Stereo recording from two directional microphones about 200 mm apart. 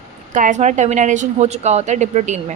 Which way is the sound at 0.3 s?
40° right (ahead or behind).